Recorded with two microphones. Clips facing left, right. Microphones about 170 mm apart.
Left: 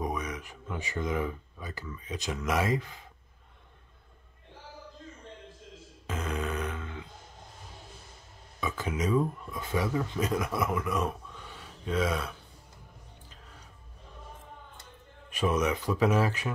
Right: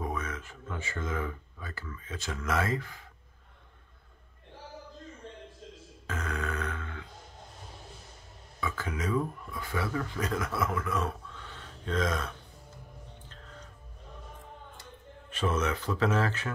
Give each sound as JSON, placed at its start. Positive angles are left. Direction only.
{"t": 0.0, "sound": "speech", "side_deg": 15}
{"t": 6.0, "sound": "grunt", "side_deg": 20}
{"t": 8.5, "sound": "speech", "side_deg": 20}
{"t": 15.2, "sound": "speech", "side_deg": 15}